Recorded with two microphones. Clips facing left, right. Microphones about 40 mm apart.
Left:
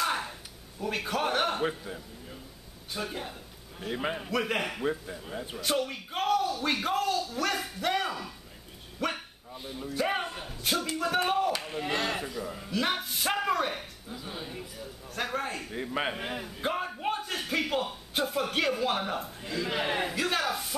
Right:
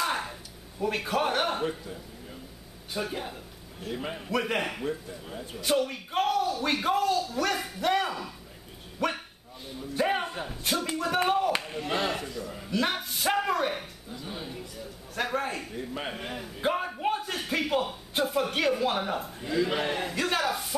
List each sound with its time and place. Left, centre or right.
0.0 s a sound: centre
0.7 s speech: centre
1.6 s a man's voice: centre
2.9 s speech: centre
3.8 s a man's voice: centre
4.3 s a man's voice: centre
11.2 s chop: centre
12.1 s a man's voice: centre
12.6 s music: centre
14.8 s a sound: centre
15.7 s a man's voice: left
16.1 s a man's voice: centre
19.9 s a man's voice: centre
20.2 s speech: centre